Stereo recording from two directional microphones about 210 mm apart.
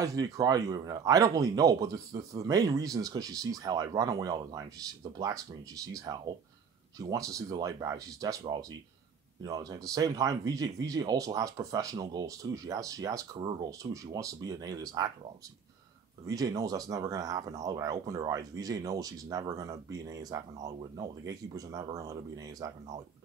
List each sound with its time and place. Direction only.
0.0 s speech: 15° right (ahead or behind)
16.3 s speech: 15° right (ahead or behind)